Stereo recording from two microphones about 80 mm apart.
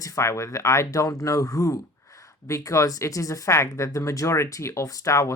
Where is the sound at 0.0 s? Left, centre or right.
Left.